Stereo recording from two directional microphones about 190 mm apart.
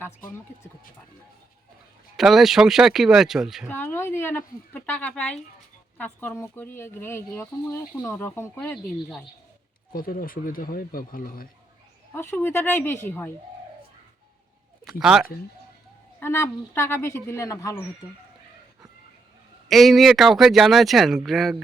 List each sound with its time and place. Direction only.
2.1 s speech: centre (ahead or behind)
3.7 s speech: 10° left (ahead or behind)
9.9 s speech: 50° left (ahead or behind)
12.1 s speech: 10° left (ahead or behind)
14.8 s speech: 5° right (ahead or behind)
16.2 s speech: 15° left (ahead or behind)
19.6 s speech: centre (ahead or behind)